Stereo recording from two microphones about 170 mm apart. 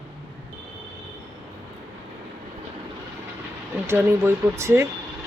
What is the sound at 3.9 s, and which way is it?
Speech, 15° right (ahead or behind).